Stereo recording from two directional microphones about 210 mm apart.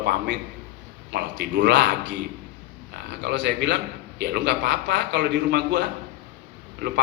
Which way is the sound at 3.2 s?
55° right (ahead or behind).